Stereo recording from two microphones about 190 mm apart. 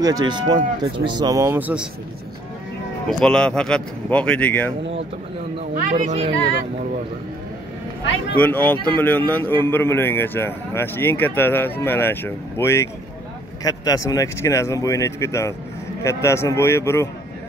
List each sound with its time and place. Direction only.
0.0 s speech: 20° right (ahead or behind)
3.1 s speech: 5° left (ahead or behind)
5.9 s speech: 30° right (ahead or behind)
8.4 s a man's voice: 10° left (ahead or behind)